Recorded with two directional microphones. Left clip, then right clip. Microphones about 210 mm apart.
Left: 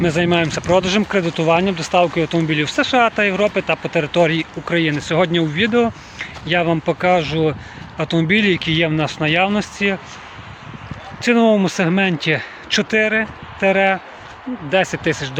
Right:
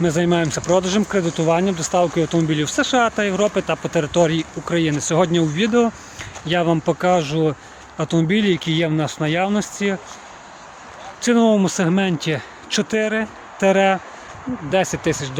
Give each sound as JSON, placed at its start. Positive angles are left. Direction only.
{"t": 0.0, "sound": "speech", "side_deg": -10}
{"t": 11.2, "sound": "speech", "side_deg": -10}
{"t": 13.6, "sound": "speech", "side_deg": -20}
{"t": 14.7, "sound": "speech", "side_deg": -5}